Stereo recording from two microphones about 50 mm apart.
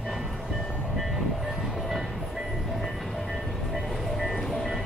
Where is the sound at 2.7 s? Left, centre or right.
Centre.